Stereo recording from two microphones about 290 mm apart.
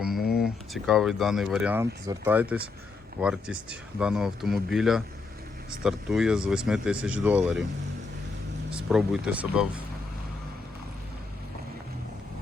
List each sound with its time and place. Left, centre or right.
0.0 s a sound: centre
0.4 s speech: centre
8.7 s speech: centre